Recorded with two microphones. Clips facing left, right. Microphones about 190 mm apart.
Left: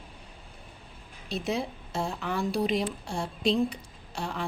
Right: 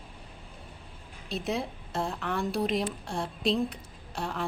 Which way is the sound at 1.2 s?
Centre (ahead or behind).